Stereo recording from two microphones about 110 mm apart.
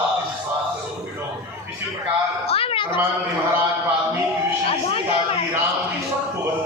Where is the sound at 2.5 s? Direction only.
55° left (ahead or behind).